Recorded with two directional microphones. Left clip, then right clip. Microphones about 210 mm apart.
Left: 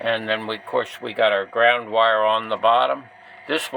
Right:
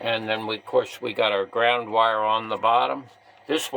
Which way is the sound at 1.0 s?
20° right (ahead or behind).